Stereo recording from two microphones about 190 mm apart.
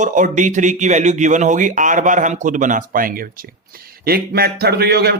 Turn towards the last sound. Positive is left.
turn(degrees=-60)  # may be behind; listen again after turning